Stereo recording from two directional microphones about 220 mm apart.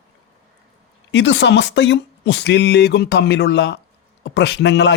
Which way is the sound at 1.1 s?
55° left (ahead or behind).